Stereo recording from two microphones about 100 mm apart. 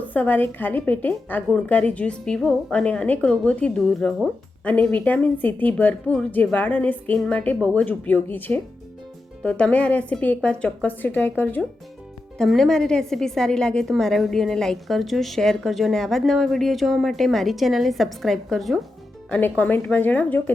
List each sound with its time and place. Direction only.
0.0 s a woman's voice: 15° left (ahead or behind)
12.4 s a woman's voice: 5° left (ahead or behind)
19.3 s a woman's voice: 15° left (ahead or behind)